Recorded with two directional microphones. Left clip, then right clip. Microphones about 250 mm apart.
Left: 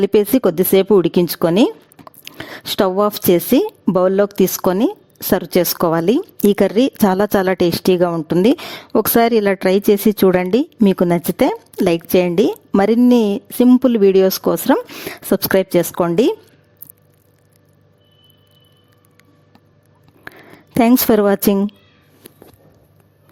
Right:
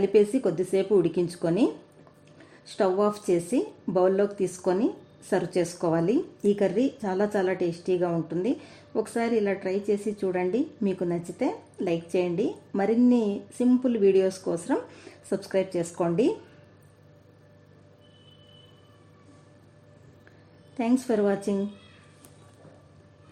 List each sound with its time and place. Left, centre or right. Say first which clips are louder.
0.1 s a woman's voice: left 8 dB; left
20.7 s a woman's voice: left 13 dB; left